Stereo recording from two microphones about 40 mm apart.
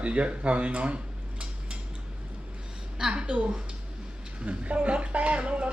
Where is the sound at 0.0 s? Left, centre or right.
Right.